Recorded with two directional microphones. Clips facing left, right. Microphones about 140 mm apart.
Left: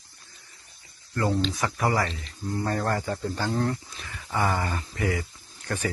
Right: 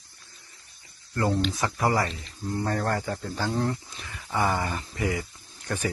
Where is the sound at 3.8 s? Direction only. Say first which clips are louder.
Even; 20° right (ahead or behind).